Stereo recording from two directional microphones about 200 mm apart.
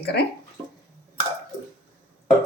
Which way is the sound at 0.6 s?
25° right (ahead or behind).